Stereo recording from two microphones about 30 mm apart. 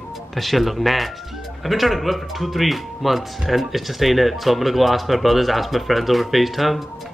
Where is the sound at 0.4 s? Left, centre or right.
Centre.